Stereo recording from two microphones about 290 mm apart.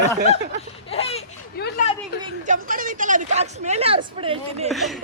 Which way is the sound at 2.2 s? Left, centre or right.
Right.